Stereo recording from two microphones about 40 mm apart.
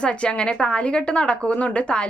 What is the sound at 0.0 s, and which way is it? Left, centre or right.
A woman's voice, left.